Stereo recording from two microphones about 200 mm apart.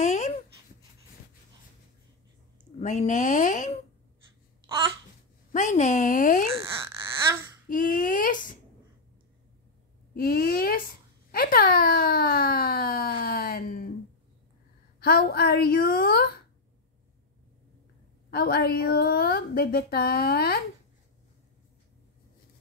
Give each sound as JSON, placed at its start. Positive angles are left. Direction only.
{"t": 0.0, "sound": "a sound", "side_deg": 35}
{"t": 2.8, "sound": "a woman's voice", "side_deg": 40}
{"t": 5.5, "sound": "a woman's voice", "side_deg": 40}
{"t": 6.7, "sound": "speech", "side_deg": -15}
{"t": 7.6, "sound": "speech", "side_deg": 45}
{"t": 10.1, "sound": "speech", "side_deg": 45}
{"t": 15.0, "sound": "speech", "side_deg": 50}
{"t": 18.3, "sound": "speech", "side_deg": 50}